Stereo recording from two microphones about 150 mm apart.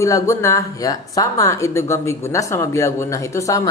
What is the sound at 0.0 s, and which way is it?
Speech, 20° left (ahead or behind).